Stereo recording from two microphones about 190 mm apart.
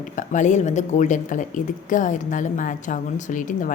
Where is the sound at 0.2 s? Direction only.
40° left (ahead or behind).